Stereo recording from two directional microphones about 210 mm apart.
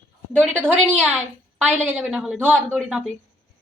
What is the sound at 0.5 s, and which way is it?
A woman's voice, 10° right (ahead or behind).